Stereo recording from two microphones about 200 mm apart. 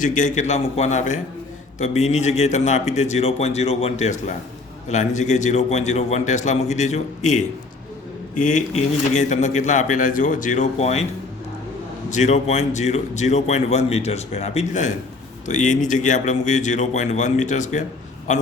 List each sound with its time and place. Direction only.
0.0 s a man's voice: 40° left (ahead or behind)
12.1 s a man's voice: 35° left (ahead or behind)